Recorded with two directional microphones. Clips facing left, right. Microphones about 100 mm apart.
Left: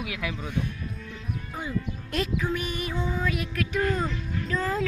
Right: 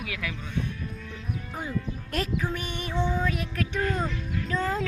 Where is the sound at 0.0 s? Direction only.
20° left (ahead or behind).